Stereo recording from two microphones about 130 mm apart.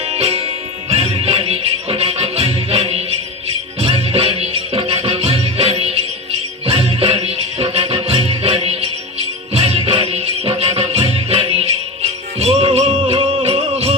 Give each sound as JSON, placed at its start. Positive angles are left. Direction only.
{"t": 0.0, "sound": "music", "side_deg": -55}